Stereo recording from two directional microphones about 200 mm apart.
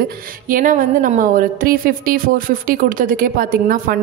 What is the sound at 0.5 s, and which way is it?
A woman's voice, 45° right (ahead or behind).